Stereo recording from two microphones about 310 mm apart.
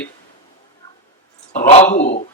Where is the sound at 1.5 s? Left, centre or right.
Left.